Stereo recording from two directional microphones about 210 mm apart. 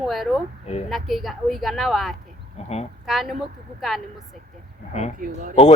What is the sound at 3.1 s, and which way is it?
Speech, centre (ahead or behind).